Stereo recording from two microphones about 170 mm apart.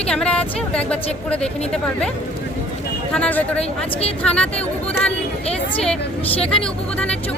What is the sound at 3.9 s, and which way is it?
Speech, 35° left (ahead or behind).